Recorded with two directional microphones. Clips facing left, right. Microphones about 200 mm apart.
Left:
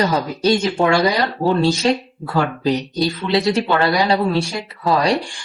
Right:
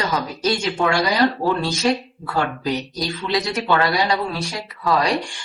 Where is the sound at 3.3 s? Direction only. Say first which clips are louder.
Left 3 dB; 30° left (ahead or behind).